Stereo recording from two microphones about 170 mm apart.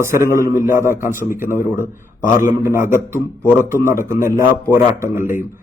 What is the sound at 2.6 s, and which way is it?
A man's voice, 15° right (ahead or behind).